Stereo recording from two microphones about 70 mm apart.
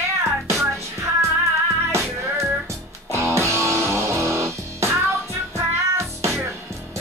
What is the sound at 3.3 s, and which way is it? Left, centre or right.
Music, right.